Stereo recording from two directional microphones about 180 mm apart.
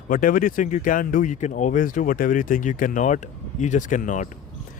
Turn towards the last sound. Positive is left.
turn(degrees=45)  # may be behind; listen again after turning